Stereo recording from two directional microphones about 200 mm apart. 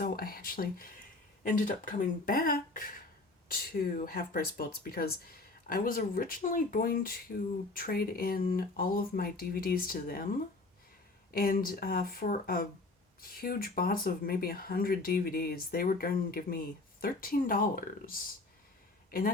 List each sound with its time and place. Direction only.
0.0 s speech: 45° left (ahead or behind)
11.3 s speech: 45° left (ahead or behind)